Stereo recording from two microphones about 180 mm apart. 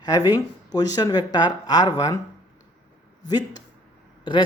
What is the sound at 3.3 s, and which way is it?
Speech, 20° left (ahead or behind).